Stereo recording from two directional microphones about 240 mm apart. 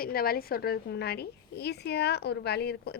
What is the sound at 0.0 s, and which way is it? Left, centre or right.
A woman's voice, left.